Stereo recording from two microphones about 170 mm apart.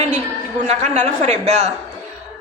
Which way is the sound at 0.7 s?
40° right (ahead or behind).